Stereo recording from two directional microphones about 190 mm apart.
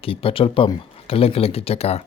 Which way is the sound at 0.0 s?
30° left (ahead or behind).